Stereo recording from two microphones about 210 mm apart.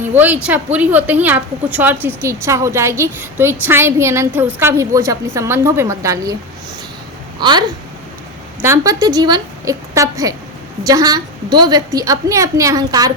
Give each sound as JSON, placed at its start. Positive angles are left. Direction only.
{"t": 0.1, "sound": "a woman's voice", "side_deg": -5}
{"t": 7.3, "sound": "speech", "side_deg": -20}
{"t": 8.6, "sound": "a woman's voice", "side_deg": -15}